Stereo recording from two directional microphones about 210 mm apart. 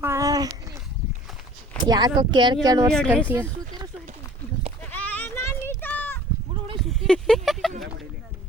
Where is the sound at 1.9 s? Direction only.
20° right (ahead or behind).